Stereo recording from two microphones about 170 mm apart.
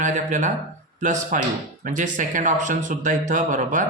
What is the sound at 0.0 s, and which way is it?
Speech, 45° right (ahead or behind).